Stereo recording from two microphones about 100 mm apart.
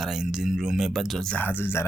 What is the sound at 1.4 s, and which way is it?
Speech, 20° left (ahead or behind).